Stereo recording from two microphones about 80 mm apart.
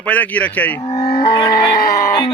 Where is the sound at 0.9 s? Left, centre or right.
Left.